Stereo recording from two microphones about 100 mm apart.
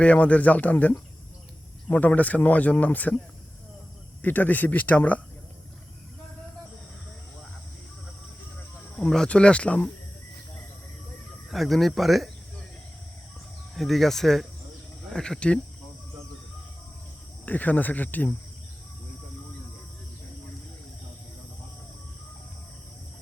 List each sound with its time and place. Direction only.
0.0 s speech: 15° left (ahead or behind)
4.2 s speech: 20° left (ahead or behind)
9.0 s speech: 5° left (ahead or behind)
11.5 s speech: centre (ahead or behind)
13.7 s speech: centre (ahead or behind)
17.4 s speech: 15° left (ahead or behind)